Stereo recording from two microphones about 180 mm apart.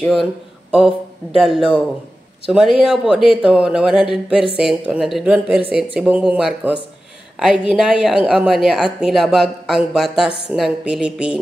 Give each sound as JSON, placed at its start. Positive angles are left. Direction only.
{"t": 0.0, "sound": "a woman's voice", "side_deg": 0}